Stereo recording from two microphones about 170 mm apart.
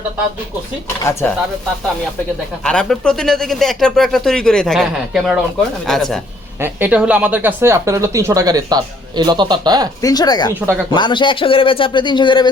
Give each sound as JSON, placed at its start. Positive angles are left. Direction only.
{"t": 1.2, "sound": "speech", "side_deg": 10}
{"t": 2.6, "sound": "speech", "side_deg": 5}
{"t": 6.6, "sound": "speech", "side_deg": -10}
{"t": 10.0, "sound": "speech", "side_deg": 20}